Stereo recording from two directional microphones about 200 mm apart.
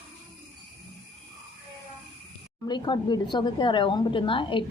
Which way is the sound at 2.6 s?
20° left (ahead or behind).